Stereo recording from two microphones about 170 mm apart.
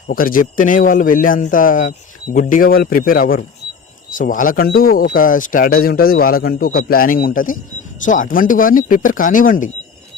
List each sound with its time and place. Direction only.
0.1 s a man's voice: 55° left (ahead or behind)